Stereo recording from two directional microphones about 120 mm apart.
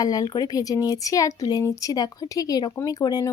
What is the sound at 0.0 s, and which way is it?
Speech, 30° left (ahead or behind).